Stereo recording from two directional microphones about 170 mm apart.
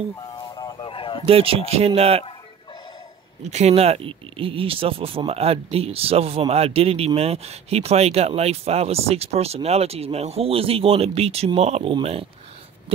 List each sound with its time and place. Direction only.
0.3 s a sound: 25° left (ahead or behind)
1.2 s speech: 35° right (ahead or behind)
3.4 s speech: 40° right (ahead or behind)